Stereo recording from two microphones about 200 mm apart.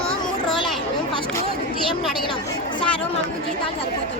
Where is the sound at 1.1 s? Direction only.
25° left (ahead or behind).